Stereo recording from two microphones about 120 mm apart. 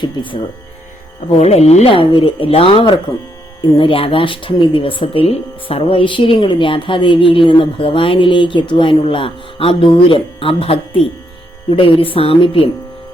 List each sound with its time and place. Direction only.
0.0 s speech: 40° left (ahead or behind)
1.4 s speech: 60° left (ahead or behind)